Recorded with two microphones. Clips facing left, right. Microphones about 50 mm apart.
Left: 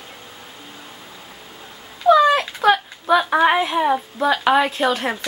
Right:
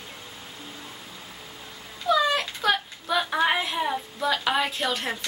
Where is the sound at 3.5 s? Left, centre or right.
Left.